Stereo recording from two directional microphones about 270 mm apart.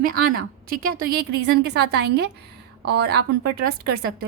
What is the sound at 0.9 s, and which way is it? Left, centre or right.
Speech, right.